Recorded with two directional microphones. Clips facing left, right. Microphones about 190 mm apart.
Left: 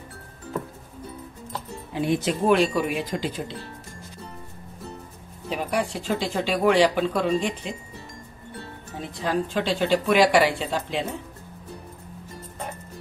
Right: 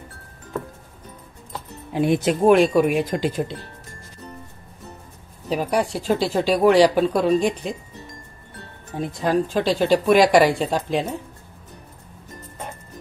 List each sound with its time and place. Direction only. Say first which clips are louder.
2.0 s speech: right 5 dB; 55° right (ahead or behind)
5.5 s speech: right 4 dB; 40° right (ahead or behind)
9.2 s speech: right 4 dB; 40° right (ahead or behind)